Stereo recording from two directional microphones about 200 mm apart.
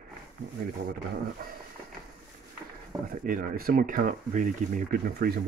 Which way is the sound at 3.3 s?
45° right (ahead or behind).